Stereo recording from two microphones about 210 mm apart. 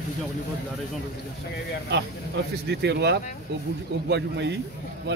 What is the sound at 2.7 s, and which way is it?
A man's voice, 55° right (ahead or behind).